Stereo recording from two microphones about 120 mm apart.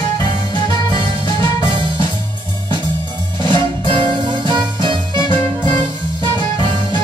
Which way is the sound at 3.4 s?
40° right (ahead or behind).